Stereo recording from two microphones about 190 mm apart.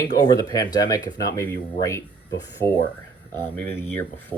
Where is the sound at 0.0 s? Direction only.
20° left (ahead or behind).